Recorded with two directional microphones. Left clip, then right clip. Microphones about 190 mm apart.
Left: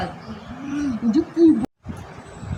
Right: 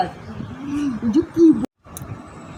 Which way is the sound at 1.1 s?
Centre (ahead or behind).